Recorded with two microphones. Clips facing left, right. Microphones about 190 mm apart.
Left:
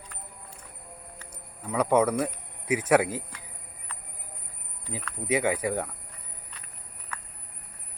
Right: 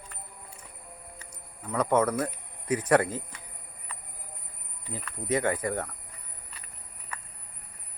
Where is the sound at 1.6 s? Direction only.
10° left (ahead or behind).